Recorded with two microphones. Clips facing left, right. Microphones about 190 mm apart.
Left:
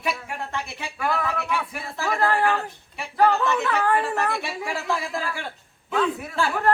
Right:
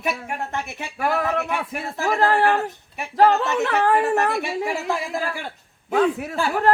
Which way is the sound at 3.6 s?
40° right (ahead or behind).